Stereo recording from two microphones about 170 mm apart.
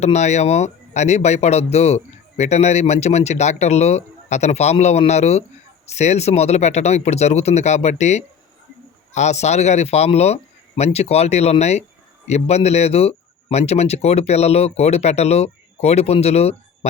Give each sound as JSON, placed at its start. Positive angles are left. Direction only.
{"t": 0.0, "sound": "a man's voice", "side_deg": 40}